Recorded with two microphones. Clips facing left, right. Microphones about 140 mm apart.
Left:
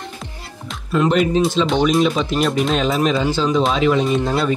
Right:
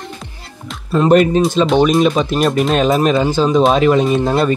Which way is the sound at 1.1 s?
50° right (ahead or behind).